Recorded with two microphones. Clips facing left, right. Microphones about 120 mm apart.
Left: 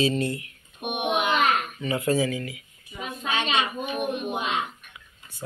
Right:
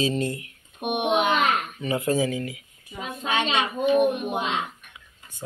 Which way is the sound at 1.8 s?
25° right (ahead or behind).